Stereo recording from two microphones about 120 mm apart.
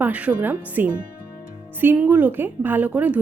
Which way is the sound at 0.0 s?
10° right (ahead or behind).